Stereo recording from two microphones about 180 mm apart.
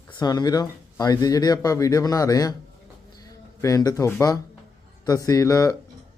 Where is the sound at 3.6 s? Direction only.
20° left (ahead or behind).